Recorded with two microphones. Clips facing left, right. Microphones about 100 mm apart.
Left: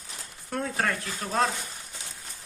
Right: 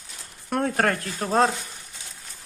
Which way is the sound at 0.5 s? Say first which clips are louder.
Right 6 dB; 55° right (ahead or behind).